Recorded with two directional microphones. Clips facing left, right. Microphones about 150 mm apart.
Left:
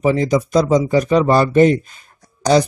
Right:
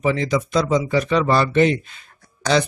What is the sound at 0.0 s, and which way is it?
Speech, 40° left (ahead or behind).